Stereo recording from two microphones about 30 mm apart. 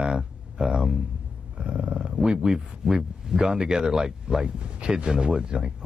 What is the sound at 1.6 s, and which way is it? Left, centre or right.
Roar, right.